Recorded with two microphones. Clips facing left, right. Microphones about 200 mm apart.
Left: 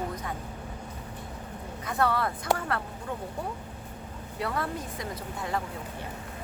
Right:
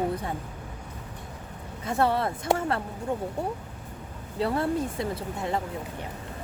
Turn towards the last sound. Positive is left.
turn(degrees=-30)  # may be behind; listen again after turning